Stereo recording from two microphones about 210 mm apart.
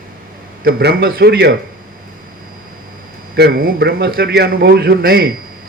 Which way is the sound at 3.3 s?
45° right (ahead or behind).